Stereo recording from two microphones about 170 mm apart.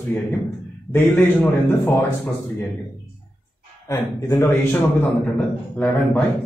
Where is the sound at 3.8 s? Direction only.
15° left (ahead or behind).